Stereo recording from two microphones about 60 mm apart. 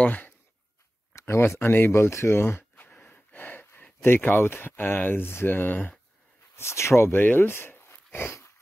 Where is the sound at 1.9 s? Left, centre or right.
Left.